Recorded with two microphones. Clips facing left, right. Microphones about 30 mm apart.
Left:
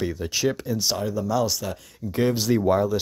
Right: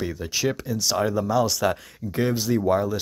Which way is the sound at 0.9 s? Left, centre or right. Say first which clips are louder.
Right 4 dB; right.